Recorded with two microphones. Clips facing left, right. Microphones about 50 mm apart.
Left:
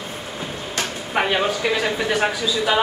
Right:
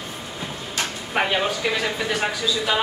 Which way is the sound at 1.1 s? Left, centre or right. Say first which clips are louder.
Left 2 dB; centre.